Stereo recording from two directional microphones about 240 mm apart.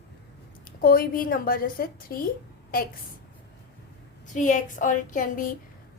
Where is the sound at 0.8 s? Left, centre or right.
Left.